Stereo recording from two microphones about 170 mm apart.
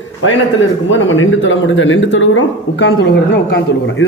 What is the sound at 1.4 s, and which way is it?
Speech, 90° left.